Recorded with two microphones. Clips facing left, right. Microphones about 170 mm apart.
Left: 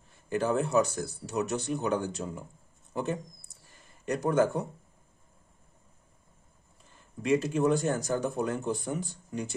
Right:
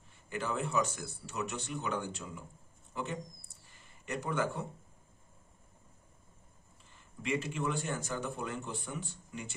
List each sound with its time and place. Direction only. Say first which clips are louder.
0.3 s speech: left 8 dB; 40° left (ahead or behind)
7.2 s speech: left 9 dB; 40° left (ahead or behind)